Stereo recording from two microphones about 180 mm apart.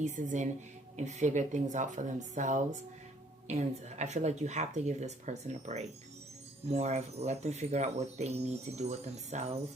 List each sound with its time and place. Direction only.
0.0 s speech: 45° right (ahead or behind)